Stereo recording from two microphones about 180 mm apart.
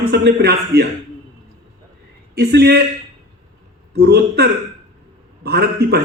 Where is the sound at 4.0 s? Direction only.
60° right (ahead or behind).